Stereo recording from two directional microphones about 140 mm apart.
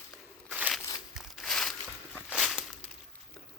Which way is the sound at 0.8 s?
25° left (ahead or behind).